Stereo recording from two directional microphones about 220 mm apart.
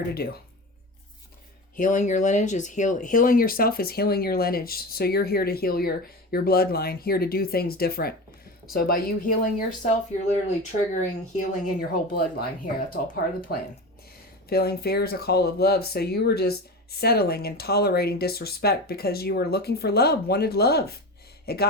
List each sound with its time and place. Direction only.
0.1 s speech: 45° left (ahead or behind)
1.7 s speech: 35° left (ahead or behind)
14.5 s speech: 45° left (ahead or behind)